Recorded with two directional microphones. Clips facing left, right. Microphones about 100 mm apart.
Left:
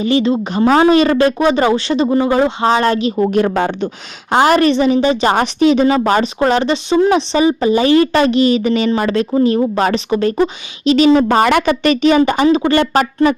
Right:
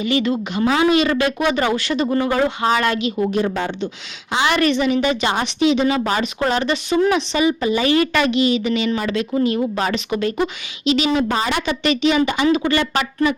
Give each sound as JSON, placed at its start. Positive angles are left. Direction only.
{"t": 0.0, "sound": "speech", "side_deg": 30}
{"t": 3.2, "sound": "speech", "side_deg": 60}
{"t": 4.3, "sound": "speech", "side_deg": 45}
{"t": 5.3, "sound": "speech", "side_deg": 45}